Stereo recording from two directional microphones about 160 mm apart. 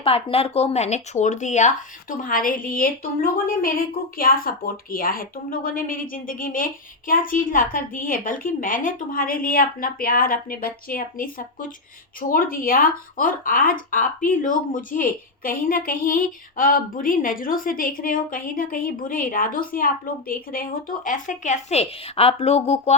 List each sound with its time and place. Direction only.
0.0 s speech: 35° left (ahead or behind)